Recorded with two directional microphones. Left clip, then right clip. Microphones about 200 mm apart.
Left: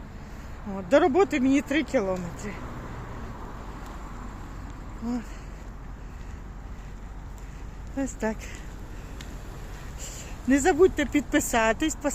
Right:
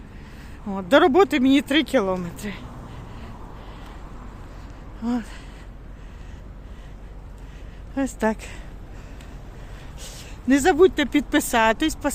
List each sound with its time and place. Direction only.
0.7 s speech: 30° right (ahead or behind)
5.0 s speech: 30° right (ahead or behind)
7.9 s speech: 25° right (ahead or behind)
10.5 s speech: 25° right (ahead or behind)